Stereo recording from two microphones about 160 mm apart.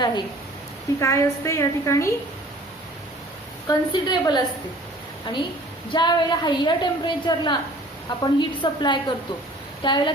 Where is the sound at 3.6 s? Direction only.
25° left (ahead or behind).